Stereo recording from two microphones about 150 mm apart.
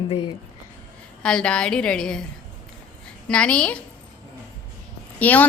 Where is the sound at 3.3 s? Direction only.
5° left (ahead or behind).